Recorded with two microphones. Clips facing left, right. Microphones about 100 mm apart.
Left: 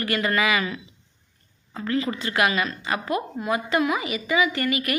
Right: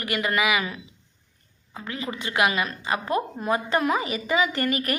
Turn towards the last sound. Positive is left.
turn(degrees=-40)  # may be behind; listen again after turning